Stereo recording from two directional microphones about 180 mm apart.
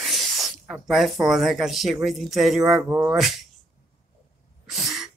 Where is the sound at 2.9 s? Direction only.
20° right (ahead or behind).